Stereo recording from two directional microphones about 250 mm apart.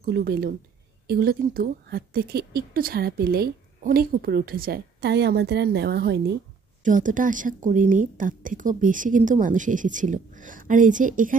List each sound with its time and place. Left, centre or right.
0.0 s speech: right